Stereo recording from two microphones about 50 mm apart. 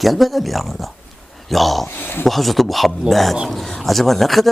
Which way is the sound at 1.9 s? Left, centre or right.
Left.